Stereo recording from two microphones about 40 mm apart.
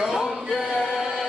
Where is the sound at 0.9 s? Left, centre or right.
Centre.